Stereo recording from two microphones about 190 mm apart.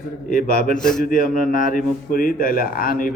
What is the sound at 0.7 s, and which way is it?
Mantra, 5° left (ahead or behind).